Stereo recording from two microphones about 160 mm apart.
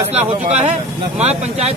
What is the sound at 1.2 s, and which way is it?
Speech, 40° right (ahead or behind).